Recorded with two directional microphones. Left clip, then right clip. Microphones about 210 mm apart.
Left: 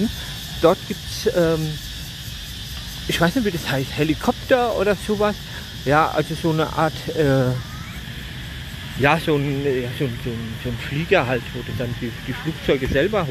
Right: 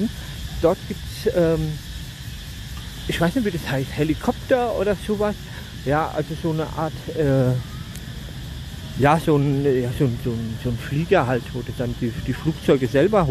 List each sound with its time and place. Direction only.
0.6 s cricket: 10° left (ahead or behind)
1.2 s speech: 5° right (ahead or behind)
3.1 s speech: centre (ahead or behind)
5.9 s cricket: 15° left (ahead or behind)
7.2 s speech: centre (ahead or behind)
9.0 s speech: 15° right (ahead or behind)
10.9 s speech: 15° right (ahead or behind)
12.6 s speech: 30° right (ahead or behind)